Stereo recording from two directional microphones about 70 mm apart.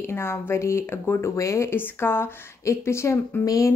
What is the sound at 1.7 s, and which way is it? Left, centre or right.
A woman's voice, left.